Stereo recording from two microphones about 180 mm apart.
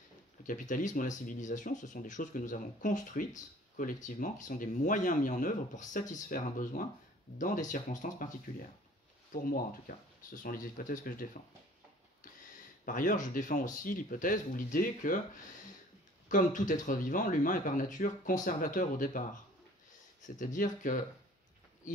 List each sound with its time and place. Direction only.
0.5 s speech: 45° left (ahead or behind)
12.8 s speech: 50° left (ahead or behind)
16.3 s speech: 45° left (ahead or behind)